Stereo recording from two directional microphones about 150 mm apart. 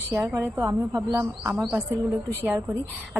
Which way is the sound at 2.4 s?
15° right (ahead or behind).